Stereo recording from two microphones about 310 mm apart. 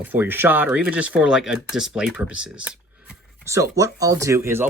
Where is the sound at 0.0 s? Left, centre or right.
Centre.